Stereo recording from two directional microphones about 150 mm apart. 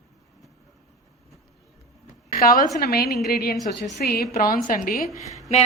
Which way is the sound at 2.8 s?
90° left.